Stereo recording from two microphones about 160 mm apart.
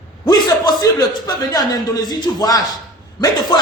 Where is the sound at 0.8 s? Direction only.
25° left (ahead or behind).